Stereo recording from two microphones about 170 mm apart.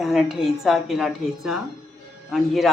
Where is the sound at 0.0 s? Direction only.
Centre (ahead or behind).